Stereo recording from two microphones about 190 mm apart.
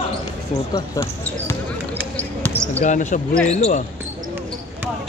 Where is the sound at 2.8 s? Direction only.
40° left (ahead or behind).